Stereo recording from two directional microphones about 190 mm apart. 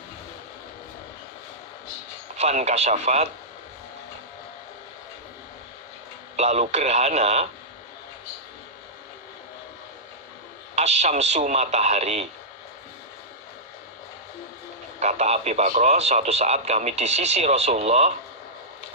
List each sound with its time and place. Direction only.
2.4 s speech: 35° right (ahead or behind)
6.3 s speech: 35° right (ahead or behind)
10.8 s speech: 35° right (ahead or behind)
15.0 s speech: 35° right (ahead or behind)